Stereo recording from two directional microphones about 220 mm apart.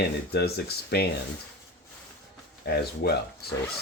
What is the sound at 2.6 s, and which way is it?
Speech, 45° left (ahead or behind).